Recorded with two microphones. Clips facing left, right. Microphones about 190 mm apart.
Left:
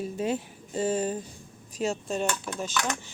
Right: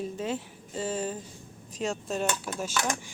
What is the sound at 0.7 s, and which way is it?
Speech, 45° left (ahead or behind).